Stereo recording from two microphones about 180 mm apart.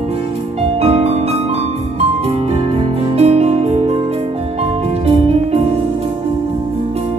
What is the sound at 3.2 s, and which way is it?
Music, 35° right (ahead or behind).